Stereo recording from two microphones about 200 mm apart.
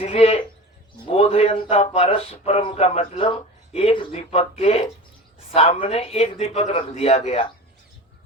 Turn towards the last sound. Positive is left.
turn(degrees=30)  # may be behind; listen again after turning